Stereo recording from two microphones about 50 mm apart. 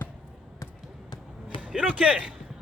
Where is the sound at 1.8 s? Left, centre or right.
Right.